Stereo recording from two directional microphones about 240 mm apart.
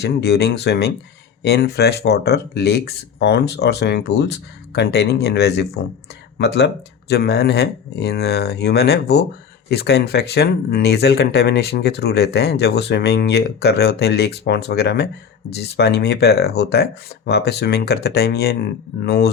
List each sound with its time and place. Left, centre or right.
0.0 s speech: left